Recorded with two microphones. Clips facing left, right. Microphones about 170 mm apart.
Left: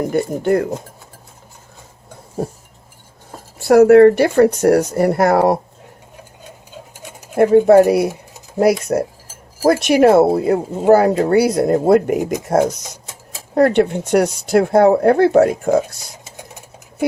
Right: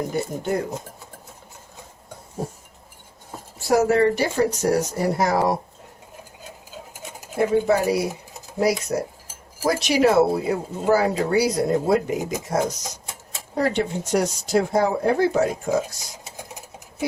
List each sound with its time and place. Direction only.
0.1 s speech: 60° left (ahead or behind)
3.6 s speech: 60° left (ahead or behind)
6.4 s a sound: centre (ahead or behind)
7.3 s speech: 55° left (ahead or behind)